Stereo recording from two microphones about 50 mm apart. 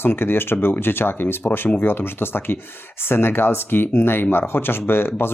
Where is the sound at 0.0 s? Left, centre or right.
Left.